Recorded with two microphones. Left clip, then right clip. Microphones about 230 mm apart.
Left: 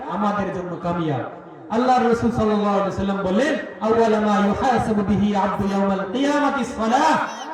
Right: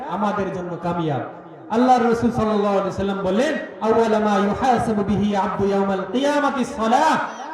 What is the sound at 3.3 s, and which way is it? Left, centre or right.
A man's voice, right.